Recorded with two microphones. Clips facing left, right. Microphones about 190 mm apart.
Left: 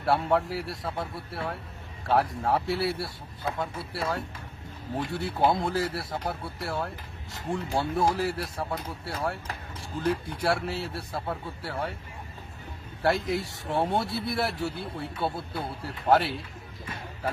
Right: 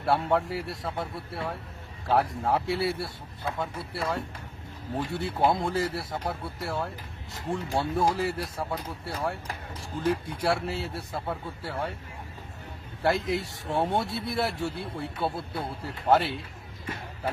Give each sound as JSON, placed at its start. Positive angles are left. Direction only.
{"t": 0.0, "sound": "speech", "side_deg": 0}
{"t": 13.0, "sound": "speech", "side_deg": 0}